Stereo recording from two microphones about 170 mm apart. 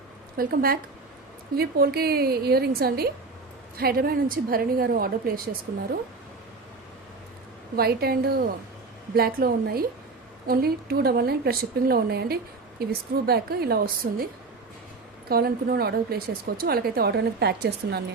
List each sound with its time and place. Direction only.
0.3 s a woman's voice: 60° right (ahead or behind)
7.8 s a woman's voice: 65° right (ahead or behind)
15.3 s a woman's voice: 65° right (ahead or behind)